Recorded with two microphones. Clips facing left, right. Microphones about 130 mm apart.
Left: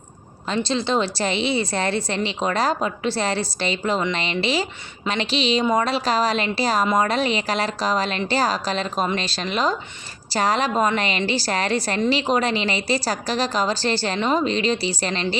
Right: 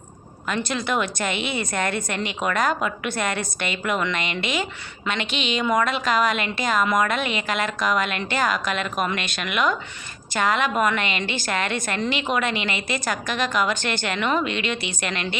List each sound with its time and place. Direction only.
0.4 s a woman's voice: 25° left (ahead or behind)